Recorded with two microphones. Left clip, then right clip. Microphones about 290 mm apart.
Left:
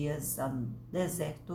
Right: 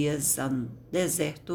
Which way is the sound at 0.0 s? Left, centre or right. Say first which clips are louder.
Right 6 dB; right.